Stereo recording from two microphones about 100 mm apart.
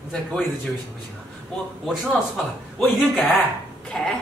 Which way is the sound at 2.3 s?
10° left (ahead or behind).